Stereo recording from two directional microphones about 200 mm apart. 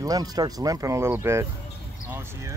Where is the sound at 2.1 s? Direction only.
15° right (ahead or behind).